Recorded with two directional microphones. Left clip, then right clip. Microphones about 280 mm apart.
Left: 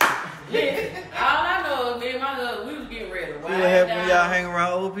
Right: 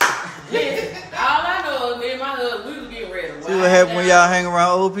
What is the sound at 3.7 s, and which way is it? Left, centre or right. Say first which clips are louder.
Mantra: right 7 dB; right.